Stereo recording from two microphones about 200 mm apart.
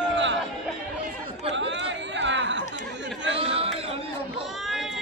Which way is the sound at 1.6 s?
65° right (ahead or behind).